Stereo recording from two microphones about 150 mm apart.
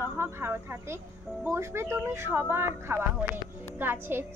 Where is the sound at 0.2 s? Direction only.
15° right (ahead or behind).